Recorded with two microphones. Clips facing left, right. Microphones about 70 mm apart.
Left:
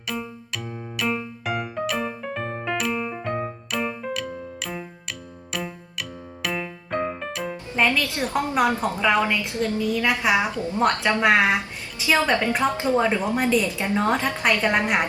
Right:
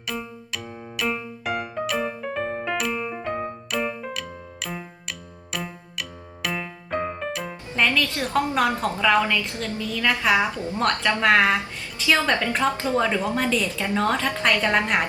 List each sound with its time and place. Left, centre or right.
0.1 s music: centre
7.8 s a woman's voice: left
10.5 s a woman's voice: right
11.1 s a woman's voice: left